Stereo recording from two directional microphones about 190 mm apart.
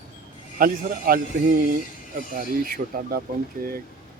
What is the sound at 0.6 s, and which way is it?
Speech, 50° right (ahead or behind).